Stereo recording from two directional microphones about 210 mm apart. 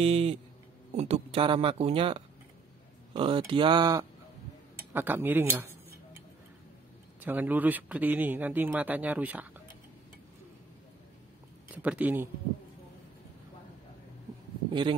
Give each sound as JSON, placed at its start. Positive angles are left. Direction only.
{"t": 0.0, "sound": "speech", "side_deg": -30}
{"t": 4.9, "sound": "a man's voice", "side_deg": -10}
{"t": 7.2, "sound": "a man's voice", "side_deg": -10}
{"t": 11.7, "sound": "a man's voice", "side_deg": -5}
{"t": 14.7, "sound": "speech", "side_deg": -25}